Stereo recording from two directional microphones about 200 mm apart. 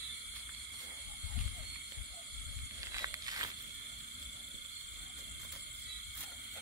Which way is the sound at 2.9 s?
20° right (ahead or behind).